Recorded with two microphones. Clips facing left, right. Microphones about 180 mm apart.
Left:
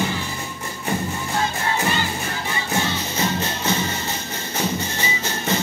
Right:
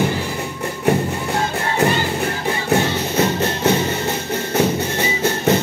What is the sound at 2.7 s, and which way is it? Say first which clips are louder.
Music: right 7 dB; 60° right (ahead or behind).